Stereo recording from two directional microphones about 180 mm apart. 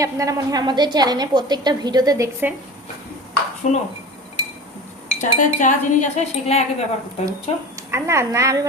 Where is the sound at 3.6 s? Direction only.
45° left (ahead or behind).